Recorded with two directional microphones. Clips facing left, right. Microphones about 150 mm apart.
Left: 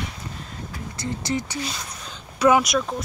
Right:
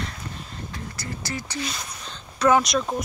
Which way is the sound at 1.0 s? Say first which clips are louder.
Left 8 dB; 20° left (ahead or behind).